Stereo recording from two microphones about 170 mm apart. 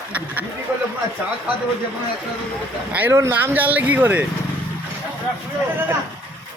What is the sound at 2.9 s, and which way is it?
A man's voice, 15° right (ahead or behind).